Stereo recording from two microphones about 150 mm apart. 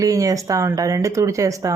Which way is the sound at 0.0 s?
25° right (ahead or behind).